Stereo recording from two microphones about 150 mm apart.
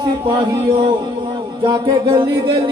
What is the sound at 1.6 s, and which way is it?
Music, 35° right (ahead or behind).